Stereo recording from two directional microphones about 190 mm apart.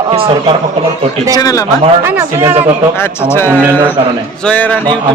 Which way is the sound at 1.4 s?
20° left (ahead or behind).